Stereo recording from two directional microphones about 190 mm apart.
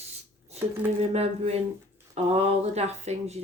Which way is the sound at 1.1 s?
35° right (ahead or behind).